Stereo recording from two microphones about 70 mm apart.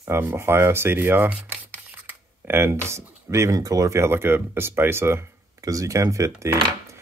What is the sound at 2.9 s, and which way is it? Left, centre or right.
Speech, right.